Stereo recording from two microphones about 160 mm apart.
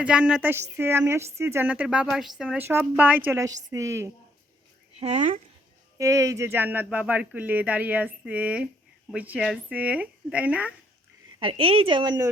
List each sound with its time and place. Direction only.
0.0 s a woman's voice: 5° right (ahead or behind)
4.9 s speech: 45° right (ahead or behind)
6.0 s speech: 20° right (ahead or behind)
11.3 s a woman's voice: 35° right (ahead or behind)